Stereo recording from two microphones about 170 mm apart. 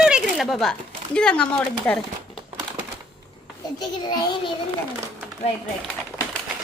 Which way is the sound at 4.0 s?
25° left (ahead or behind).